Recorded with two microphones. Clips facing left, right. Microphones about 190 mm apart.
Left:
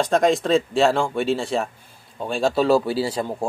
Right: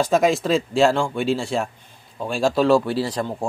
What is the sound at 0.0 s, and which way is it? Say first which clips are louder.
A man's voice: even; 5° right (ahead or behind).